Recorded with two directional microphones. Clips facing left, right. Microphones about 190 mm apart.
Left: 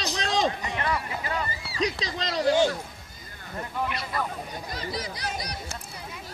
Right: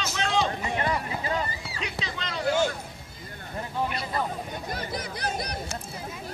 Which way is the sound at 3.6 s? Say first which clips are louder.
Right 1 dB; 25° right (ahead or behind).